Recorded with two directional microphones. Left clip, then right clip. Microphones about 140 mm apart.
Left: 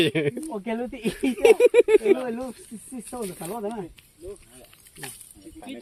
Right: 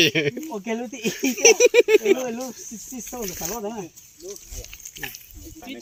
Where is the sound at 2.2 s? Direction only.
10° right (ahead or behind).